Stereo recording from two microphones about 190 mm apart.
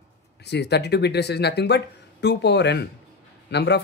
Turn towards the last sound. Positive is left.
turn(degrees=65)  # may be behind; listen again after turning